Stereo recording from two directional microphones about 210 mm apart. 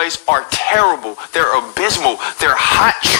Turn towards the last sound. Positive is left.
turn(degrees=50)  # may be behind; listen again after turning